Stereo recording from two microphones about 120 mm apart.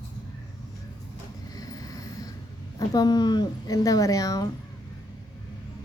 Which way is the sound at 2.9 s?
35° left (ahead or behind).